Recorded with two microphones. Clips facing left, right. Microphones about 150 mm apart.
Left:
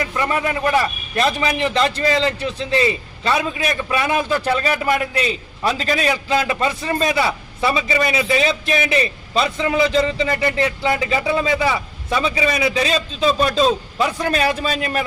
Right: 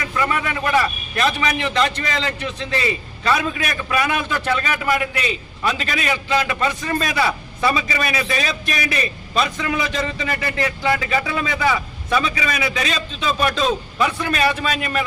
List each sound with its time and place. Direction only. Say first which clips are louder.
0.1 s a man's voice: left 1 dB; 30° left (ahead or behind)